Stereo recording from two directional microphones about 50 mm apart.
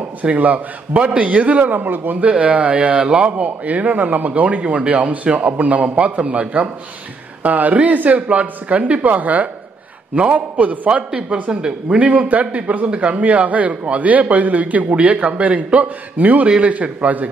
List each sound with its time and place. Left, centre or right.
0.2 s speech: right
7.4 s a man's voice: right
11.1 s a man's voice: right